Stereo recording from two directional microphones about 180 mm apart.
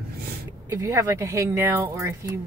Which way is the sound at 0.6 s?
15° right (ahead or behind).